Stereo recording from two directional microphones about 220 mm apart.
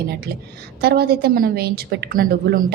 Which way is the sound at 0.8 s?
45° right (ahead or behind).